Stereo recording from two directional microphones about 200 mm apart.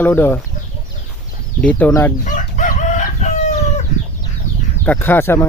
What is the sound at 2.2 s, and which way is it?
Chicken, 40° left (ahead or behind).